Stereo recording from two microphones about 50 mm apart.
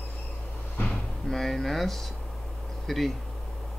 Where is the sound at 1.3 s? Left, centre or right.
Centre.